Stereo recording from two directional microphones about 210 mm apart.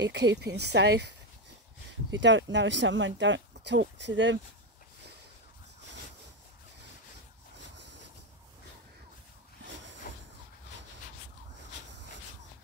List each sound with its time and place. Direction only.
0.0 s speech: 55° right (ahead or behind)
2.0 s speech: 60° right (ahead or behind)
7.5 s vehicle: 55° right (ahead or behind)
10.1 s vehicle: 45° left (ahead or behind)